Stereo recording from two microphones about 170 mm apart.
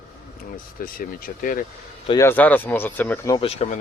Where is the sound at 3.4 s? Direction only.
35° left (ahead or behind).